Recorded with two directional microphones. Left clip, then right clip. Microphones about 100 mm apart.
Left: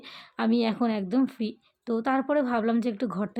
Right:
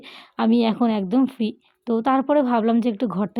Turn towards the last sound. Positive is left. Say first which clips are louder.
# right 6 dB
turn(degrees=-40)  # may be behind; listen again after turning